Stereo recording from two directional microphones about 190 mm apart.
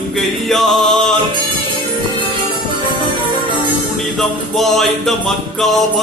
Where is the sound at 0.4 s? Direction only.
Centre (ahead or behind).